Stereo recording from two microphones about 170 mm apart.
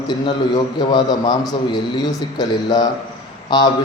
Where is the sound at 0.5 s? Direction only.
25° left (ahead or behind).